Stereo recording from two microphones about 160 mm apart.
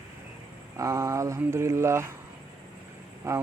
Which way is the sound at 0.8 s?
20° right (ahead or behind).